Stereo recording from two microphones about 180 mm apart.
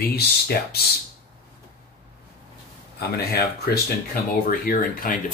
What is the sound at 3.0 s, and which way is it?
Speech, 60° left (ahead or behind).